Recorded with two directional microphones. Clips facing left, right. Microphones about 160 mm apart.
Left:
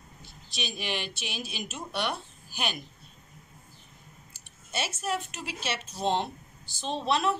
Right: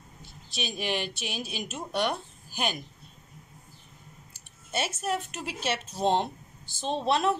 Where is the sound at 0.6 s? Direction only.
45° right (ahead or behind).